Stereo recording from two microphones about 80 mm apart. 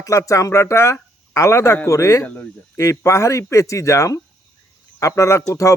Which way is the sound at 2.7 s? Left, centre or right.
Left.